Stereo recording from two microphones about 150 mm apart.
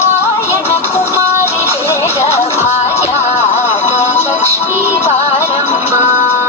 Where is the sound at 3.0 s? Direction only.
45° left (ahead or behind).